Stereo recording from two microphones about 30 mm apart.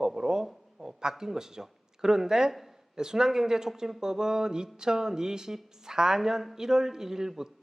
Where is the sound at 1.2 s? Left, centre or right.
Centre.